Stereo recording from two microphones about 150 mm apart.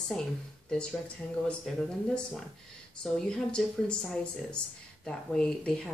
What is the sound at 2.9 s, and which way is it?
Speech, 5° left (ahead or behind).